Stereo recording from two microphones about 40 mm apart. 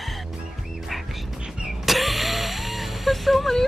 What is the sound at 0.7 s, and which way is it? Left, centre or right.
Music, centre.